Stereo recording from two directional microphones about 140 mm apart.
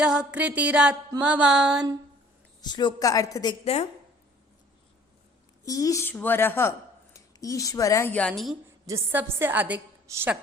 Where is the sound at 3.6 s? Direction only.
45° left (ahead or behind).